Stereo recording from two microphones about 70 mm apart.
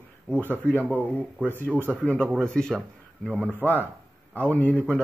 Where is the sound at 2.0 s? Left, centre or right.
Centre.